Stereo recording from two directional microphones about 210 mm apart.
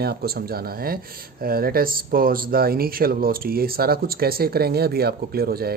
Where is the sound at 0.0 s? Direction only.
50° right (ahead or behind).